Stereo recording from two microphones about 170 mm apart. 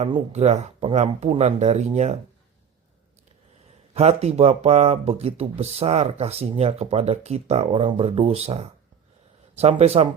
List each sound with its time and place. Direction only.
0.0 s speech: 40° right (ahead or behind)
3.9 s speech: 40° right (ahead or behind)